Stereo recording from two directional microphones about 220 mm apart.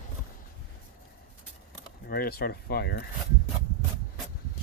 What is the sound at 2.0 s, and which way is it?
Speech, 45° left (ahead or behind).